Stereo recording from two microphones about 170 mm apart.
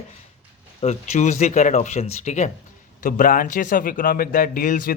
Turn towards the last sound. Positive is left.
turn(degrees=55)  # may be behind; listen again after turning